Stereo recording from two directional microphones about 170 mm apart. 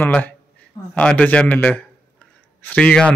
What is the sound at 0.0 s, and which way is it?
Speech, 10° left (ahead or behind).